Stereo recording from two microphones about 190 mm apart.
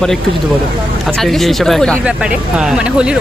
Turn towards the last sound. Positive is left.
turn(degrees=-5)  # may be behind; listen again after turning